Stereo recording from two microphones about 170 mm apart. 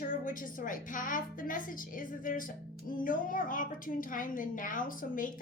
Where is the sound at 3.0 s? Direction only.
55° left (ahead or behind).